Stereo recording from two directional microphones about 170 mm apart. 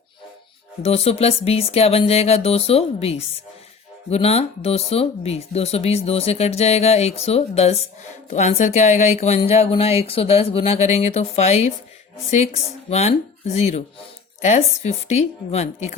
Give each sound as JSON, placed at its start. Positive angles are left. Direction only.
{"t": 0.8, "sound": "speech", "side_deg": 35}
{"t": 12.9, "sound": "a woman's voice", "side_deg": 40}